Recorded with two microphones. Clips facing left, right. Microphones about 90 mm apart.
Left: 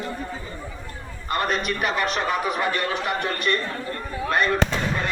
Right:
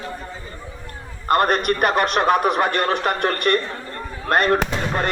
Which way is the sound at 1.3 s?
55° right (ahead or behind).